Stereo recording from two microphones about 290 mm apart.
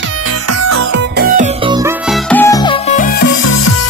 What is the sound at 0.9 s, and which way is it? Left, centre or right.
Music, right.